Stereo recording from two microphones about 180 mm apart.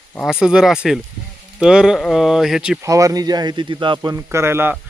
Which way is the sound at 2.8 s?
20° right (ahead or behind).